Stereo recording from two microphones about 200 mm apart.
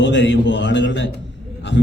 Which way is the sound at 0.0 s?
65° left (ahead or behind).